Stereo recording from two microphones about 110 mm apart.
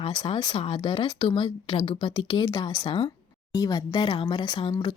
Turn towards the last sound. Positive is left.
turn(degrees=45)  # may be behind; listen again after turning